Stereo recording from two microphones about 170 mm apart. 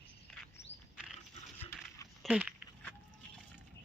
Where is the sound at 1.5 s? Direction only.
10° left (ahead or behind).